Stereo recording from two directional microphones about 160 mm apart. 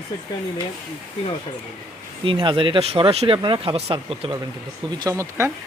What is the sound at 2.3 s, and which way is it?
Speech, 35° right (ahead or behind).